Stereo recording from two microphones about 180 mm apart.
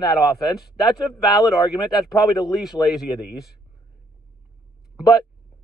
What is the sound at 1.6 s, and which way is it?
Speech, 25° left (ahead or behind).